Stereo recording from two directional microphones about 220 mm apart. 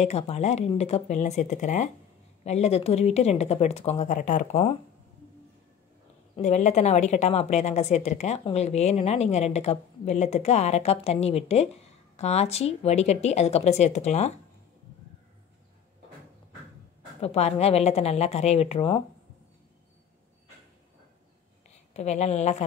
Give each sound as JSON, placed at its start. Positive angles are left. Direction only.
{"t": 0.0, "sound": "a woman's voice", "side_deg": 30}
{"t": 6.3, "sound": "a woman's voice", "side_deg": 30}
{"t": 17.2, "sound": "a woman's voice", "side_deg": 30}
{"t": 21.9, "sound": "a woman's voice", "side_deg": 30}